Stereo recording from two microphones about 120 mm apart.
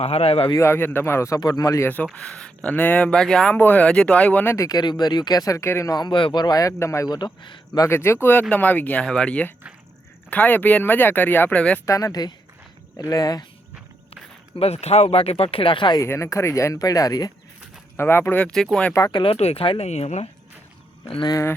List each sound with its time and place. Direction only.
0.0 s speech: 55° left (ahead or behind)
0.5 s speech: 20° left (ahead or behind)
2.1 s speech: 10° left (ahead or behind)
4.5 s speech: 30° left (ahead or behind)
7.8 s speech: 20° left (ahead or behind)
11.9 s speech: 25° left (ahead or behind)
14.6 s speech: 60° left (ahead or behind); by 16.0 s 45° left (ahead or behind)
16.0 s speech: 25° left (ahead or behind)
17.9 s speech: 20° left (ahead or behind)
19.1 s speech: 50° left (ahead or behind)
19.9 s speech: 70° left (ahead or behind)
21.2 s speech: 25° left (ahead or behind)